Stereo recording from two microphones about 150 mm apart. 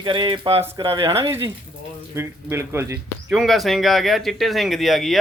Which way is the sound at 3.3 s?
Centre (ahead or behind).